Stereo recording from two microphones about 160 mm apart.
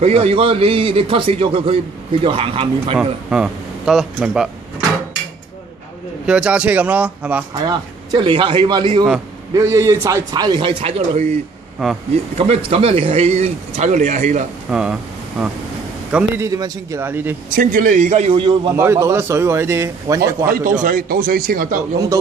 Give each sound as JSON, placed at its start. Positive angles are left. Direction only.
{"t": 0.0, "sound": "a man's voice", "side_deg": -40}
{"t": 3.0, "sound": "a man's voice", "side_deg": -5}
{"t": 6.2, "sound": "a man's voice", "side_deg": -5}
{"t": 7.5, "sound": "a man's voice", "side_deg": -25}
{"t": 9.5, "sound": "a man's voice", "side_deg": -20}
{"t": 12.4, "sound": "speech", "side_deg": -40}
{"t": 14.7, "sound": "a man's voice", "side_deg": -5}
{"t": 16.4, "sound": "a man's voice", "side_deg": -20}
{"t": 17.5, "sound": "speech", "side_deg": -60}
{"t": 18.7, "sound": "a man's voice", "side_deg": -15}
{"t": 20.4, "sound": "speech", "side_deg": -60}